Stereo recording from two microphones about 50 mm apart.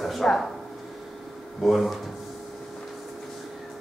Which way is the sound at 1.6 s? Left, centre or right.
Centre.